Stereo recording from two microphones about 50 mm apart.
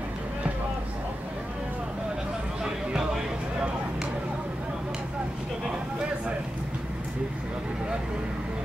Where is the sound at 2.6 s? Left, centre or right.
Centre.